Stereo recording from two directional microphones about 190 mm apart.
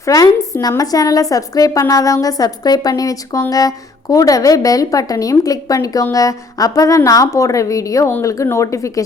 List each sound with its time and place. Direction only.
0.0 s a woman's voice: 15° left (ahead or behind)